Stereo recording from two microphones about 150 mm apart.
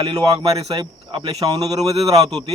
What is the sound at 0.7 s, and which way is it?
Speech, 30° right (ahead or behind).